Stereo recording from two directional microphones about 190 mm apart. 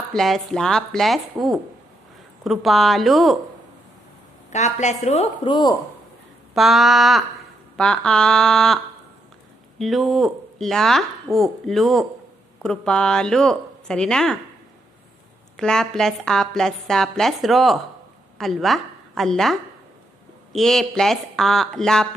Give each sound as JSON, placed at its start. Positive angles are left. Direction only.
{"t": 0.1, "sound": "speech", "side_deg": 0}
{"t": 4.5, "sound": "a woman's voice", "side_deg": 40}
{"t": 6.5, "sound": "speech", "side_deg": 0}
{"t": 9.8, "sound": "speech", "side_deg": 0}
{"t": 15.5, "sound": "a woman's voice", "side_deg": 5}